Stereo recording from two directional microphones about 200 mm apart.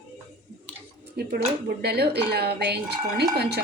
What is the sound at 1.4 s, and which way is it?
A woman's voice, 50° right (ahead or behind).